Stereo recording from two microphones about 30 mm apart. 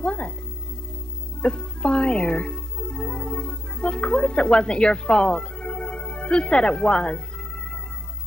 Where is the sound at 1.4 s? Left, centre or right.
Left.